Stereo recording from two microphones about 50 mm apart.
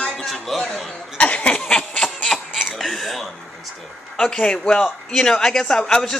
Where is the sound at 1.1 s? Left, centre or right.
Left.